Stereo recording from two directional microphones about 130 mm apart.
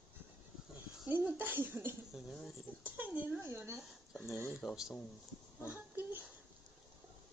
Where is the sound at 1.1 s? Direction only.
15° right (ahead or behind).